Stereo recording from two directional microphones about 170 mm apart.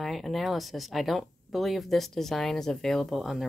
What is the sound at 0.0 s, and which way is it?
Speech, centre (ahead or behind).